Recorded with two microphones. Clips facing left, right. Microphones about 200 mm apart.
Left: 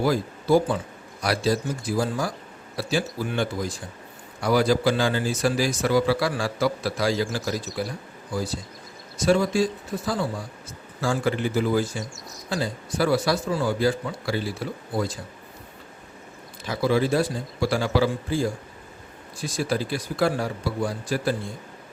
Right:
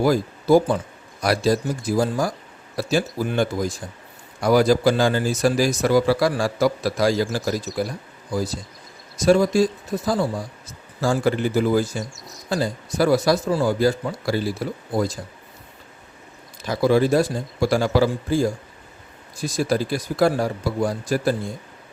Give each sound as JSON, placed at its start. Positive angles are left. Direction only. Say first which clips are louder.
{"t": 0.0, "sound": "a man's voice", "louder": "right 4 dB", "side_deg": -45}
{"t": 9.1, "sound": "a man's voice", "louder": "right 4 dB", "side_deg": -40}
{"t": 16.6, "sound": "a man's voice", "louder": "right 4 dB", "side_deg": -45}